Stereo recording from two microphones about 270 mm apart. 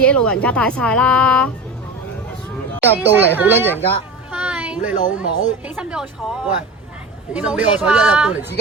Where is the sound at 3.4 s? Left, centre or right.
Centre.